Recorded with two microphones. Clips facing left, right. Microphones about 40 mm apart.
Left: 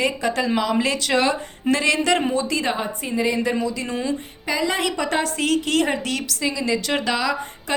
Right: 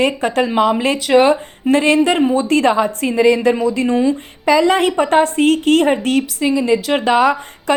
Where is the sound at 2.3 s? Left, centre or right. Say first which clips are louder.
Right 9 dB; right.